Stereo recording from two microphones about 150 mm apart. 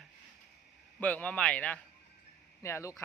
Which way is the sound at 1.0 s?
10° left (ahead or behind).